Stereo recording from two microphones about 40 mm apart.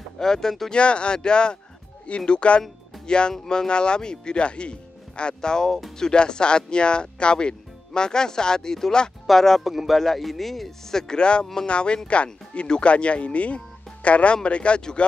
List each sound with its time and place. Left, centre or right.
0.2 s speech: centre
0.7 s speech: left; by 9.6 s centre
9.6 s speech: centre; by 14.8 s left